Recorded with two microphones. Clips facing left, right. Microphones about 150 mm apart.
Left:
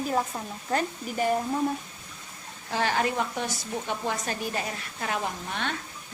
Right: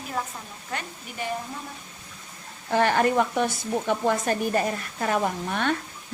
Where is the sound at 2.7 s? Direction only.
55° right (ahead or behind).